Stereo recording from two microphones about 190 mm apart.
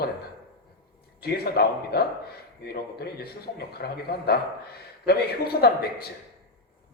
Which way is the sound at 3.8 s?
60° left (ahead or behind).